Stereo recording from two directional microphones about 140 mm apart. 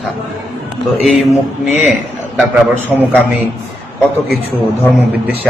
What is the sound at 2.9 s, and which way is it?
Speech, 5° right (ahead or behind).